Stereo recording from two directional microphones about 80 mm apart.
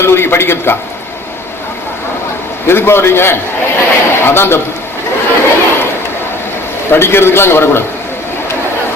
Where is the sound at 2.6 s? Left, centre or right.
Left.